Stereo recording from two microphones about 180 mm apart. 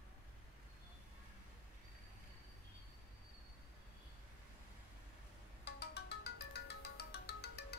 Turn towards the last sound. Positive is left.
turn(degrees=65)  # may be behind; listen again after turning